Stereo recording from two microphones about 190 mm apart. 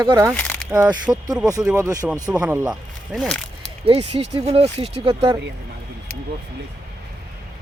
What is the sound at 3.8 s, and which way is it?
Speech, 30° right (ahead or behind).